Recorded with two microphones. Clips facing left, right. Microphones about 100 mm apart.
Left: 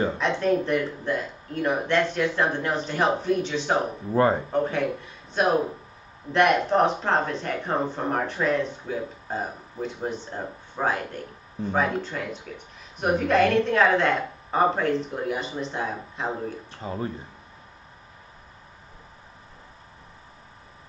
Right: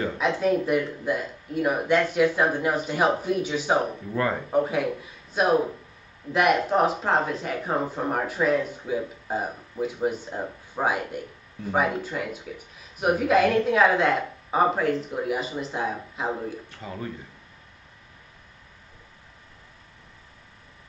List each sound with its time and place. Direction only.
0.2 s speech: 5° right (ahead or behind)
4.1 s speech: 30° left (ahead or behind)
4.5 s a woman's voice: 10° right (ahead or behind)
16.7 s speech: 30° left (ahead or behind)